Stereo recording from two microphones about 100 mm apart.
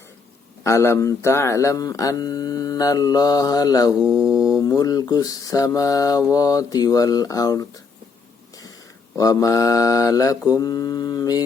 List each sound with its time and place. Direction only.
0.6 s speech: 30° left (ahead or behind)
4.2 s mantra: 5° right (ahead or behind)
4.6 s speech: 40° left (ahead or behind)
9.1 s speech: 35° left (ahead or behind)